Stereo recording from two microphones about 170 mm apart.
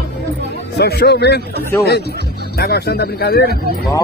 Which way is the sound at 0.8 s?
75° left (ahead or behind).